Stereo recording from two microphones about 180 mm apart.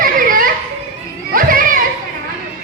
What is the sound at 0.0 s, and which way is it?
Children playing, 50° right (ahead or behind).